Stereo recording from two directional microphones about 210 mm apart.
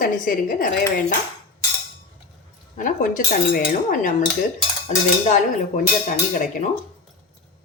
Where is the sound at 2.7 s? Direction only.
40° left (ahead or behind).